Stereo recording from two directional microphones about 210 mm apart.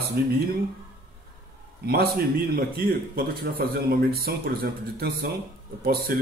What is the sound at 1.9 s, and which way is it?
A man's voice, 45° right (ahead or behind).